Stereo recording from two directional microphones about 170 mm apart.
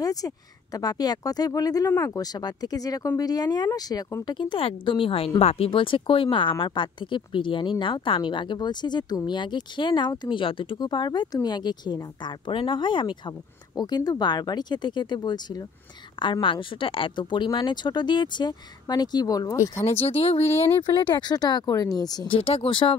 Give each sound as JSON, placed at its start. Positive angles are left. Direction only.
{"t": 0.0, "sound": "a sound", "side_deg": 20}
{"t": 0.7, "sound": "speech", "side_deg": 25}
{"t": 19.8, "sound": "speech", "side_deg": 35}